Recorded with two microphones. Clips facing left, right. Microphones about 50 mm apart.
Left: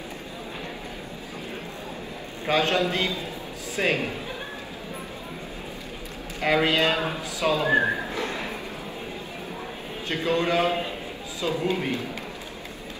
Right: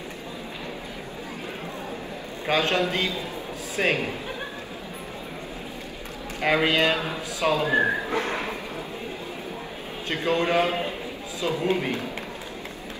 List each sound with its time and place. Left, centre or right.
2.4 s a man's voice: right
6.4 s a man's voice: right
7.6 s speech: left
8.1 s speech: right
10.0 s a man's voice: right